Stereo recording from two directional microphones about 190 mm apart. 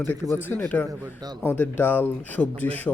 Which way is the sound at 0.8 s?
20° right (ahead or behind).